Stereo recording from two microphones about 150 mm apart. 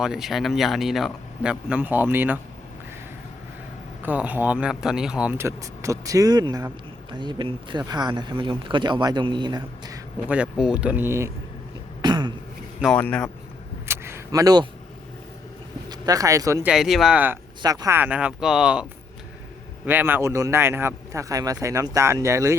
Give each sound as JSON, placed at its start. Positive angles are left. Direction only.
{"t": 0.0, "sound": "a man's voice", "side_deg": -5}
{"t": 4.0, "sound": "speech", "side_deg": -10}
{"t": 10.2, "sound": "speech", "side_deg": -10}
{"t": 12.0, "sound": "throat clearing", "side_deg": -30}
{"t": 12.8, "sound": "a man's voice", "side_deg": 5}
{"t": 13.8, "sound": "a sound", "side_deg": -15}
{"t": 15.9, "sound": "speech", "side_deg": -25}
{"t": 16.6, "sound": "a man's voice", "side_deg": -5}
{"t": 17.6, "sound": "a man's voice", "side_deg": -25}